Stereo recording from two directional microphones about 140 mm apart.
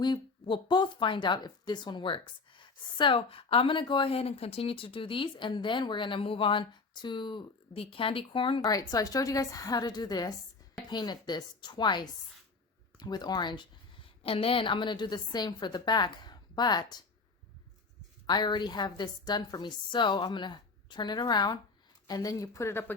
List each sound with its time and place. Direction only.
0.0 s speech: 35° left (ahead or behind)
8.6 s a woman's voice: 25° left (ahead or behind)
18.3 s a woman's voice: 30° left (ahead or behind); by 23.0 s 15° left (ahead or behind)